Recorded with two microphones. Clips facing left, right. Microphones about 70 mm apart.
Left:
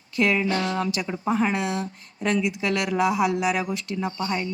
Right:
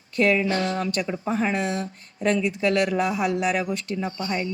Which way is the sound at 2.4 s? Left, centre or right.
Centre.